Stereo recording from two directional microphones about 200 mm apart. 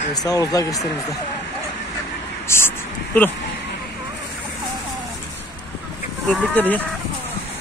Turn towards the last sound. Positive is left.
turn(degrees=10)  # may be behind; listen again after turning